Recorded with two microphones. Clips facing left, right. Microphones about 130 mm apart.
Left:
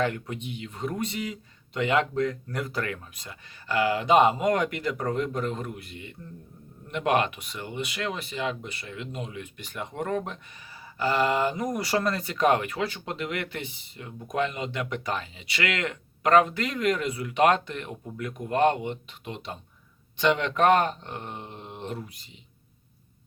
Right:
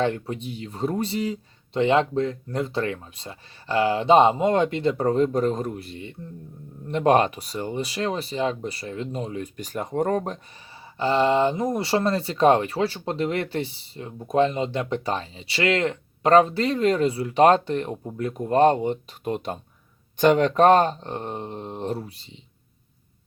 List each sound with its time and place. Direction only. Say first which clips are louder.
0.0 s speech: right 4 dB; 30° right (ahead or behind)
10.9 s speech: right 4 dB; 25° right (ahead or behind)